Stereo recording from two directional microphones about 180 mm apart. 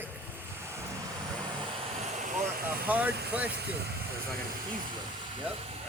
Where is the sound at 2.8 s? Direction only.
10° right (ahead or behind).